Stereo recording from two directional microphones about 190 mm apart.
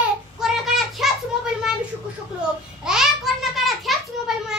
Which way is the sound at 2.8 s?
5° right (ahead or behind).